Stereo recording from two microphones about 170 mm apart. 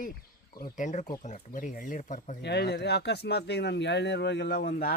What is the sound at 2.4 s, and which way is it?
Speech, 75° left (ahead or behind).